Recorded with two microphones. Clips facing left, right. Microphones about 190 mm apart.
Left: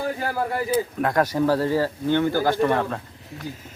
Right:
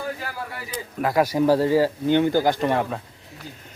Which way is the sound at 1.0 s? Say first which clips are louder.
Right 4 dB; 10° right (ahead or behind).